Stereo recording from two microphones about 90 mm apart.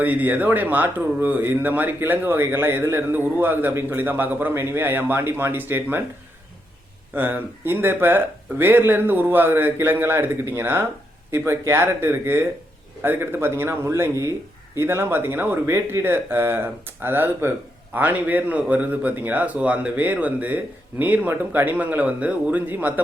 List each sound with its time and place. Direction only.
0.0 s speech: 20° right (ahead or behind)
7.1 s a man's voice: 20° right (ahead or behind)